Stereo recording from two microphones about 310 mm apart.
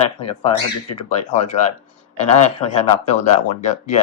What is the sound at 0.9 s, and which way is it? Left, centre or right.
Speech, left.